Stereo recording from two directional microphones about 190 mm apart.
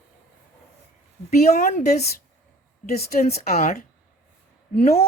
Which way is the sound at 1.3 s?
40° left (ahead or behind).